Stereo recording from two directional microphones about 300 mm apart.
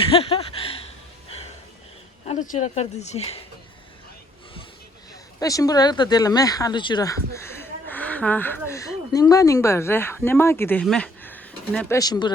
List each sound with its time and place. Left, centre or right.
0.1 s a sound: centre
2.2 s speech: left
5.4 s speech: centre